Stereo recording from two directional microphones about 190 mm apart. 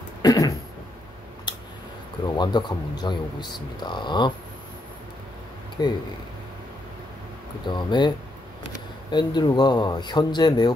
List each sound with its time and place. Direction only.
0.2 s throat clearing: 20° left (ahead or behind)
2.3 s speech: 25° left (ahead or behind)
5.8 s speech: 20° left (ahead or behind)
7.6 s speech: 25° left (ahead or behind)
9.1 s speech: 20° left (ahead or behind)